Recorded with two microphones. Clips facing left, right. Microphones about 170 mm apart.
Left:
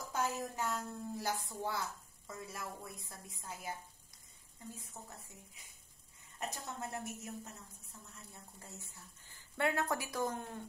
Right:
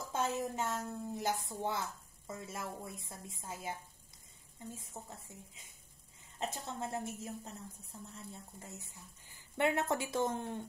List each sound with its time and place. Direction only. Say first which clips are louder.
0.1 s speech: right 2 dB; 25° right (ahead or behind)
6.4 s speech: right 3 dB; 25° right (ahead or behind)
7.9 s speech: right 6 dB; 40° right (ahead or behind)
8.3 s speech: right 5 dB; 20° right (ahead or behind)